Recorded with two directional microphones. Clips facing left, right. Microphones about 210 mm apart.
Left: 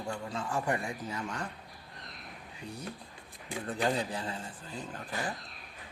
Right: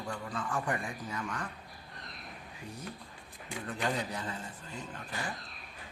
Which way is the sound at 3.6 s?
35° left (ahead or behind).